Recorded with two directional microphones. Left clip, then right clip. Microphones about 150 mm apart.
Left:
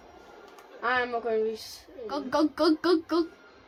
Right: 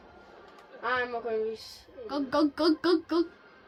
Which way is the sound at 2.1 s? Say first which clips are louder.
Left 1 dB; 10° right (ahead or behind).